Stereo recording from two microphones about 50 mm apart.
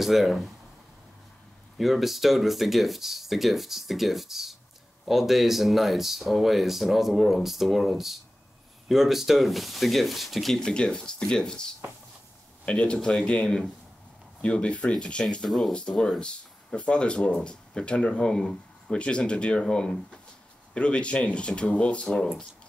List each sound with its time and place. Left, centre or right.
0.0 s speech: centre
1.8 s speech: centre
10.7 s speech: centre
15.4 s speech: centre
16.0 s speech: centre